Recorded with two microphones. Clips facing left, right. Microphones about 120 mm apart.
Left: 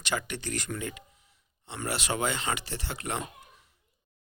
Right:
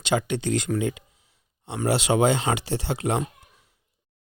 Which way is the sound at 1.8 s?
80° right.